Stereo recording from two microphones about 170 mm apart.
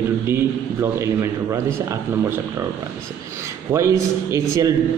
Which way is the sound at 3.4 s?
15° right (ahead or behind).